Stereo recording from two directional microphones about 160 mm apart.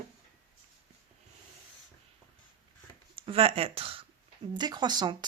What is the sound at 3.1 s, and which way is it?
Speech, 35° right (ahead or behind).